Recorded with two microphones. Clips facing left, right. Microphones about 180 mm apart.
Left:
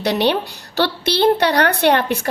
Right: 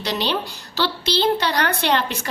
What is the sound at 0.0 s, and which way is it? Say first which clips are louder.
A woman's voice: left 6 dB; 60° left (ahead or behind).